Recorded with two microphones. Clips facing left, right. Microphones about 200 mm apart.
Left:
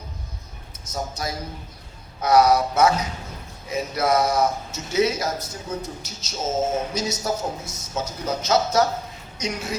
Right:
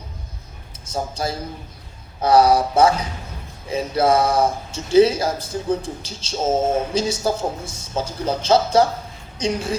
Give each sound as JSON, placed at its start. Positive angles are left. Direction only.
{"t": 0.9, "sound": "a man's voice", "side_deg": -30}